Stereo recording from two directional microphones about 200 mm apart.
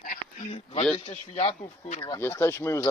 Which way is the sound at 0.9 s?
30° left (ahead or behind).